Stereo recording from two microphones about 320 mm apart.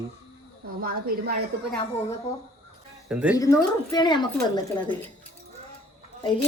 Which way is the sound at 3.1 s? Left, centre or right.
Centre.